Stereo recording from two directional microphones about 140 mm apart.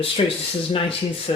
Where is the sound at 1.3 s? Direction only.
35° left (ahead or behind).